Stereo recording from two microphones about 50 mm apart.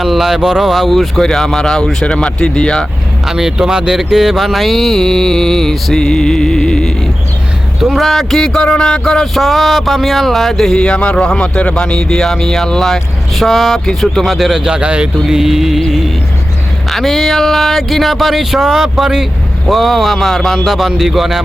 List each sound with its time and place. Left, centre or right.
0.0 s speech: centre
3.2 s speech: centre
7.8 s speech: centre
10.8 s speech: centre; by 15.1 s right
15.3 s speech: centre